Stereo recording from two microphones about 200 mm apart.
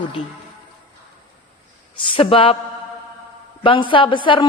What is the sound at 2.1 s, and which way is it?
Speech, 25° left (ahead or behind).